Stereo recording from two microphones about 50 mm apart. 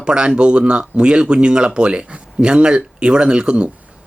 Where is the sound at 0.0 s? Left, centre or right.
Centre.